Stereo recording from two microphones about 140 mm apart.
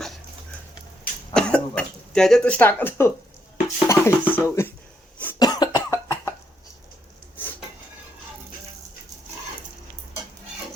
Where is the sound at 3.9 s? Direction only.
20° left (ahead or behind).